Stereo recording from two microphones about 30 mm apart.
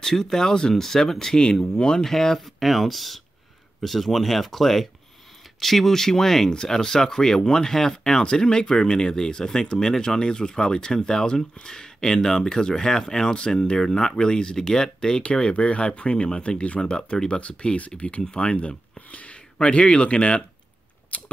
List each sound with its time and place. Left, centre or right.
0.0 s speech: centre
1.4 s speech: left
2.0 s speech: centre
2.4 s speech: centre
8.0 s speech: left
15.6 s speech: left
16.9 s speech: left
17.4 s speech: left
18.3 s a sound: left
19.6 s speech: left
21.1 s scissors: left